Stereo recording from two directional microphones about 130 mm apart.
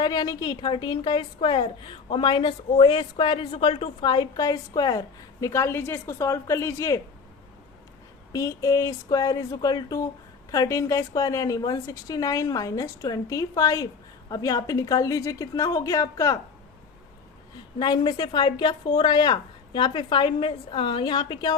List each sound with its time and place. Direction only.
0.0 s a woman's voice: 35° left (ahead or behind)
8.3 s a woman's voice: 25° left (ahead or behind)
17.7 s a woman's voice: 35° left (ahead or behind)